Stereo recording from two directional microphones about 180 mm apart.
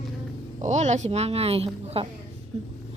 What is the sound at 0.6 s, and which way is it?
Speech, 40° right (ahead or behind).